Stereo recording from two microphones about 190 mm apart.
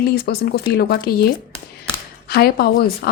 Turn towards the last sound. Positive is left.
turn(degrees=55)  # may be behind; listen again after turning